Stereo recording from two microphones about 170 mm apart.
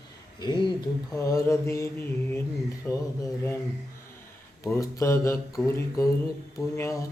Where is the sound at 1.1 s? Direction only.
20° left (ahead or behind).